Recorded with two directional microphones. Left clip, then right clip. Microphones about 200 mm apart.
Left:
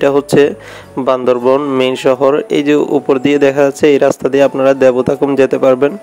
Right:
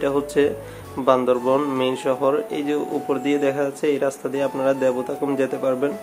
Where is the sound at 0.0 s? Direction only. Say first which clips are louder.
Left 10 dB; 45° left (ahead or behind).